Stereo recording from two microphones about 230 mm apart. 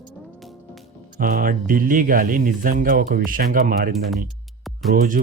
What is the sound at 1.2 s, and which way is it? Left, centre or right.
Speech, right.